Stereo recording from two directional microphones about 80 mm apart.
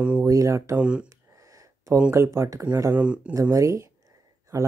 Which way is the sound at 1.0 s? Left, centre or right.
Right.